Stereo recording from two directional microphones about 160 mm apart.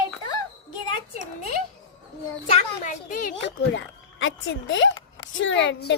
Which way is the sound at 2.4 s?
40° left (ahead or behind).